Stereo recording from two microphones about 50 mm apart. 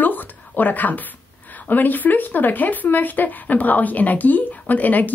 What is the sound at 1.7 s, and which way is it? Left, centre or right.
Speech, left.